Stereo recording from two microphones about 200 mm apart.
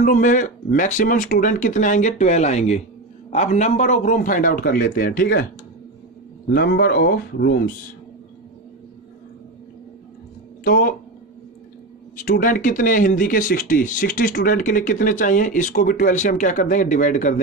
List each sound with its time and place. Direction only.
0.0 s speech: 40° left (ahead or behind)
6.5 s speech: 55° left (ahead or behind)
10.6 s speech: 45° left (ahead or behind)
12.2 s speech: 45° left (ahead or behind)